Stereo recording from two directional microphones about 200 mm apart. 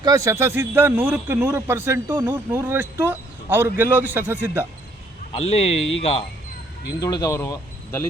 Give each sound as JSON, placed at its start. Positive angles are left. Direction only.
{"t": 0.0, "sound": "a man's voice", "side_deg": -15}
{"t": 5.4, "sound": "speech", "side_deg": 30}
{"t": 7.0, "sound": "speech", "side_deg": 20}